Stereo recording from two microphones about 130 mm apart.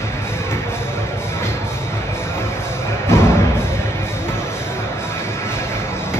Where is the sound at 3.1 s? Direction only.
20° left (ahead or behind).